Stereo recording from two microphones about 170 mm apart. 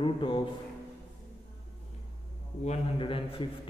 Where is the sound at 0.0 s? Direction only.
30° left (ahead or behind).